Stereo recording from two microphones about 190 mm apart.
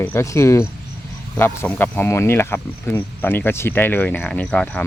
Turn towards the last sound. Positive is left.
turn(degrees=5)  # may be behind; listen again after turning